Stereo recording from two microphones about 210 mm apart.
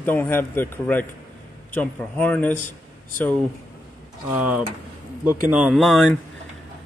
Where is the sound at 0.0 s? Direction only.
10° left (ahead or behind).